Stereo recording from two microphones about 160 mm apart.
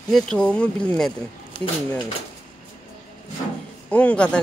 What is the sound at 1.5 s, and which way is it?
Speech, 30° left (ahead or behind).